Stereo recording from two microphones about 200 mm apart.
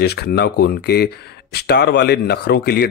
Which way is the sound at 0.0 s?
55° left (ahead or behind).